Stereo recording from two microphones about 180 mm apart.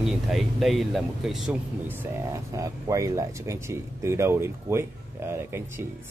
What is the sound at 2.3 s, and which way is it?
Speech, 20° right (ahead or behind).